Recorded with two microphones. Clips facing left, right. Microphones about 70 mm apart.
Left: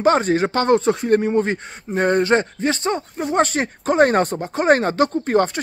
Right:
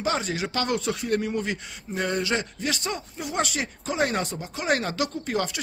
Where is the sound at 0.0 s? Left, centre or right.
Left.